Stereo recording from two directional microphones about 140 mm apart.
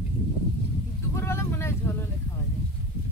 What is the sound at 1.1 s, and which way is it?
Vehicle, 20° left (ahead or behind).